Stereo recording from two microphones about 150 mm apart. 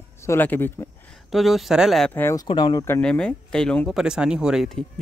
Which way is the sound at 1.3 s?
Centre (ahead or behind).